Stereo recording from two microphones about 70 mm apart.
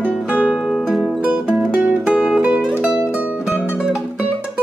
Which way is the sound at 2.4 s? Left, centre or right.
Centre.